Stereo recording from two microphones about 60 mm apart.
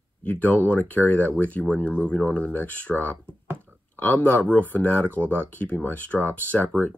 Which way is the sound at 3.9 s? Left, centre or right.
Left.